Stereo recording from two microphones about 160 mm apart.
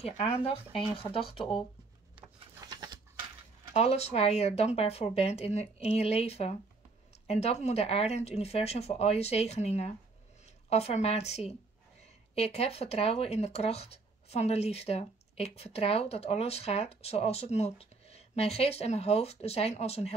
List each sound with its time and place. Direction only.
0.0 s speech: 40° left (ahead or behind)
2.6 s pant: 25° right (ahead or behind)
3.7 s speech: 40° left (ahead or behind)